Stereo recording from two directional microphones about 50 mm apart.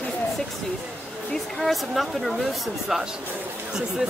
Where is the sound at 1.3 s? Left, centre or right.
Centre.